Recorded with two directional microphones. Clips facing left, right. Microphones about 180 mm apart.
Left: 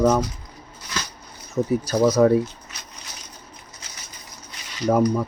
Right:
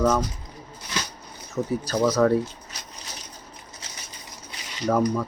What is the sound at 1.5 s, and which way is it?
Speech, 15° left (ahead or behind).